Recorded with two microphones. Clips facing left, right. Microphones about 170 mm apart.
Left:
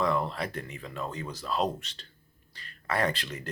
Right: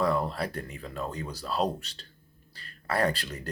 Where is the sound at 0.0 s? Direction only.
40° right (ahead or behind).